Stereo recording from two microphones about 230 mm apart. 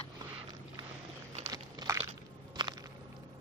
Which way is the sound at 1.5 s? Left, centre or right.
Centre.